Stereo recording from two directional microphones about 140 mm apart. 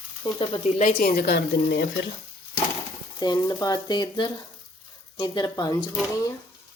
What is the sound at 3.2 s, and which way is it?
Speech, 30° left (ahead or behind).